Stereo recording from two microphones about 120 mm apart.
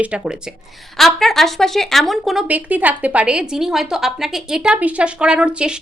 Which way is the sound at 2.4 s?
15° right (ahead or behind).